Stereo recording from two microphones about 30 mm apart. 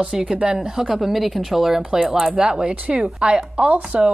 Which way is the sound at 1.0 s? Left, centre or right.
Centre.